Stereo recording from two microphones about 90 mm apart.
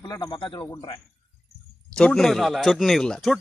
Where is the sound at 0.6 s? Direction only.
35° left (ahead or behind).